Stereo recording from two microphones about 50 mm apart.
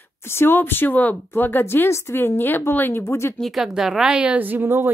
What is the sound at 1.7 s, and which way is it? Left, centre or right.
Speech, left.